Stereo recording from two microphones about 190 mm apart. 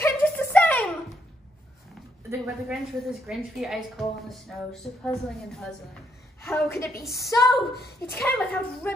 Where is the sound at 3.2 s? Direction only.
Centre (ahead or behind).